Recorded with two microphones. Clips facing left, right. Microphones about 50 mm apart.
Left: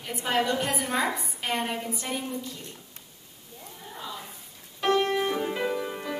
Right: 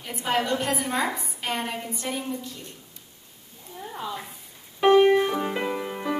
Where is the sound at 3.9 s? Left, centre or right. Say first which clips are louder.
Right 5 dB; right.